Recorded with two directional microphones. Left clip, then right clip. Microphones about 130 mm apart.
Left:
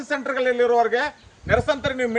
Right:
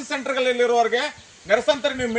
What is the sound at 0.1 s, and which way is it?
Speech, 80° right.